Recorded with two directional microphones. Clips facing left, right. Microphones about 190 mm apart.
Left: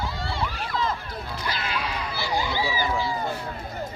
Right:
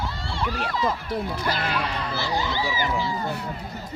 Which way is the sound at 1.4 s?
50° right (ahead or behind).